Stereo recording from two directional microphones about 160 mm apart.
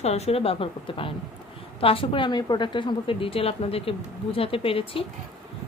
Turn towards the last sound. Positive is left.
turn(degrees=35)  # may be behind; listen again after turning